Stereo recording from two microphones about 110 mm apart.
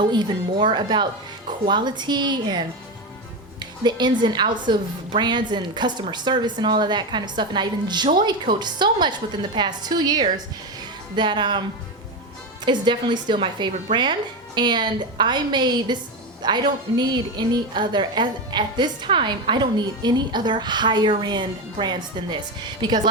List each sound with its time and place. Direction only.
0.0 s a woman's voice: 45° right (ahead or behind)
12.6 s a woman's voice: 45° right (ahead or behind)